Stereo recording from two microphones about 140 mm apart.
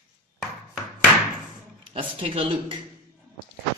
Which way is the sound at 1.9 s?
40° right (ahead or behind).